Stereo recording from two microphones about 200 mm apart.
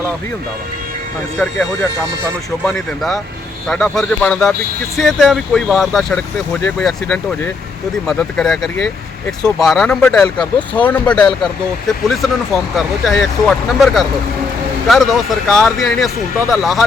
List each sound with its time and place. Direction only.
1.4 s speech: 5° left (ahead or behind)